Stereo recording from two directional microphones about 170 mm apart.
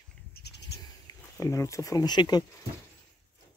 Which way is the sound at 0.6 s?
20° left (ahead or behind).